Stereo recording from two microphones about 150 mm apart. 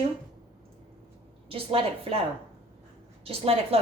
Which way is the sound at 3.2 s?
40° right (ahead or behind).